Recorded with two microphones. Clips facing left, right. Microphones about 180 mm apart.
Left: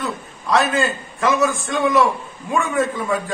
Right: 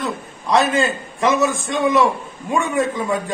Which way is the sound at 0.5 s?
Centre (ahead or behind).